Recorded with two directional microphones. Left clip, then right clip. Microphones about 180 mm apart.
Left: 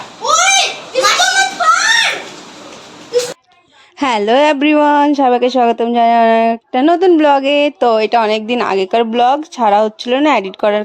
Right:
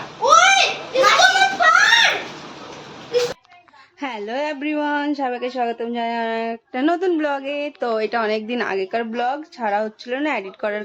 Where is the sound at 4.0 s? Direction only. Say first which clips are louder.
Left 14 dB; 60° left (ahead or behind).